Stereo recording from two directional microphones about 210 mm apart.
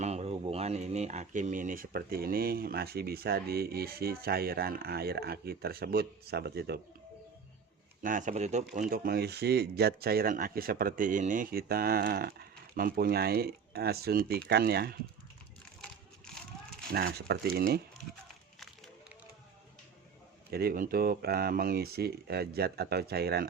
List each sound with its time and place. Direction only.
0.0 s speech: 30° right (ahead or behind); by 6.7 s 50° right (ahead or behind)
8.0 s speech: 40° right (ahead or behind)
15.8 s a sound: 5° left (ahead or behind)
16.9 s speech: 50° right (ahead or behind)
20.5 s speech: 45° right (ahead or behind)